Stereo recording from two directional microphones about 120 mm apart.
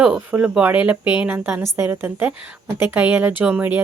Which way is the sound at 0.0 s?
10° right (ahead or behind).